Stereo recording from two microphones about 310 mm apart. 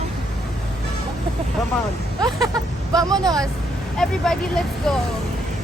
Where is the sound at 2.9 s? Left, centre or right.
Centre.